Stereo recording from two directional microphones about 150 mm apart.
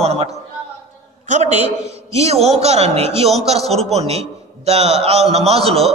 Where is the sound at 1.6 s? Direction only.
45° right (ahead or behind).